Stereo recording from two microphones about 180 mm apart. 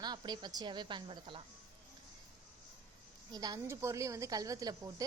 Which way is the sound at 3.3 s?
20° right (ahead or behind).